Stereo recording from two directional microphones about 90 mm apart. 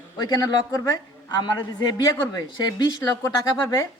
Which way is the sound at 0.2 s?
50° left (ahead or behind).